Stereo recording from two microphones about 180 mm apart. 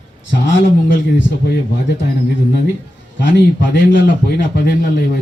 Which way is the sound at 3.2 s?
85° left.